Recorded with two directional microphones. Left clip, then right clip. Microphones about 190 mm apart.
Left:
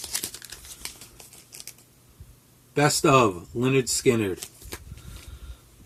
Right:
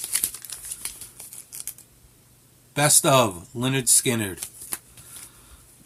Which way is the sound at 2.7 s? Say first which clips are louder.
Even; 20° right (ahead or behind).